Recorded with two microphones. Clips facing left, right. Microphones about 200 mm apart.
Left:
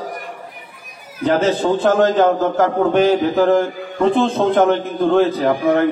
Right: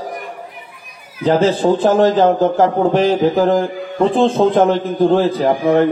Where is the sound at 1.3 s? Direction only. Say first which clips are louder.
Right 2 dB; 30° right (ahead or behind).